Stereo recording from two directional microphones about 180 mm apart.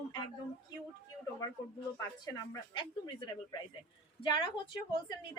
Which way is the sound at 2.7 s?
25° left (ahead or behind).